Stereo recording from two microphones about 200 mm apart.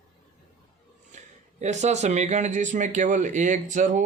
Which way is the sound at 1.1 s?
35° right (ahead or behind).